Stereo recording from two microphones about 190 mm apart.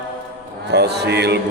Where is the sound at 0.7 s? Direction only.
60° right (ahead or behind).